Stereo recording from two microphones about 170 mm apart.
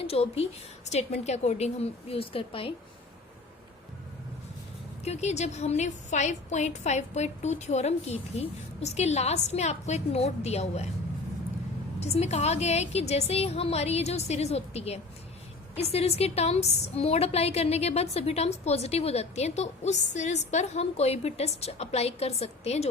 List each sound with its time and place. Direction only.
0.0 s a woman's voice: 35° left (ahead or behind)
5.0 s a woman's voice: 40° left (ahead or behind)
11.9 s a woman's voice: 40° left (ahead or behind)